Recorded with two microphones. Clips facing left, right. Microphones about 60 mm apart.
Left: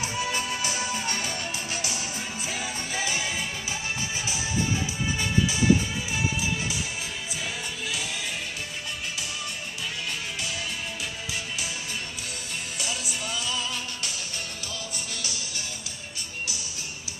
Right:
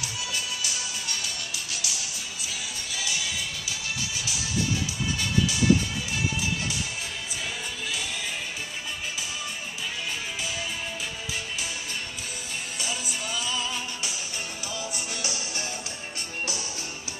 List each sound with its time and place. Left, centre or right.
0.0 s music: left
12.7 s music: centre